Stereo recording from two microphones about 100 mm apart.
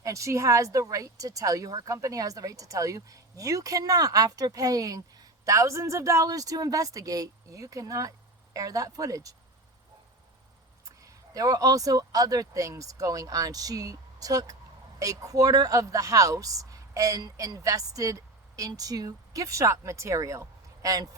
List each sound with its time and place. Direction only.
0.0 s speech: 30° right (ahead or behind)
10.8 s speech: 35° right (ahead or behind)